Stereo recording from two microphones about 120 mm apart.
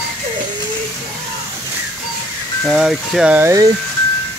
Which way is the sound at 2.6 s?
Centre (ahead or behind).